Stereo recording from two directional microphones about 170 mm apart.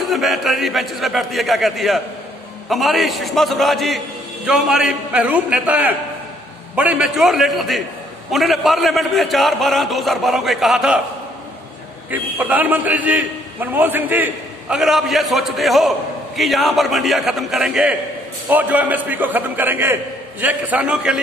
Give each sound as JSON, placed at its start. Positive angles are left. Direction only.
{"t": 0.0, "sound": "a man's voice", "side_deg": 0}
{"t": 12.1, "sound": "a man's voice", "side_deg": -10}